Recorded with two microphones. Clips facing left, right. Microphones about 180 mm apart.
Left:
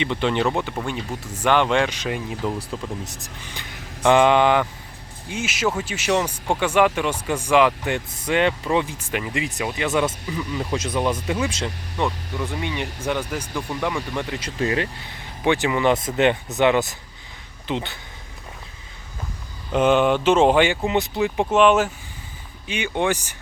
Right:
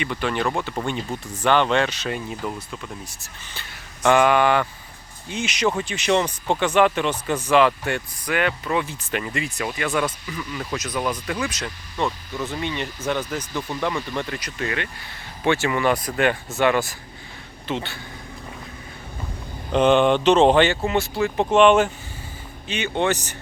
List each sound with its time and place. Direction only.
0.0 s speech: 20° left (ahead or behind)
0.9 s speech: 10° left (ahead or behind)
5.3 s speech: 5° left (ahead or behind); by 8.9 s 25° left (ahead or behind)
8.9 s speech: 10° left (ahead or behind)
12.4 s speech: 15° left (ahead or behind)
14.3 s speech: 25° left (ahead or behind)
15.4 s speech: 15° left (ahead or behind)
19.7 s speech: 5° left (ahead or behind)
21.5 s speech: 5° left (ahead or behind)